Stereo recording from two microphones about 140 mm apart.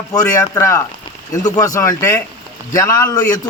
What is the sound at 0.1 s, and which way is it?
A man's voice, 25° left (ahead or behind).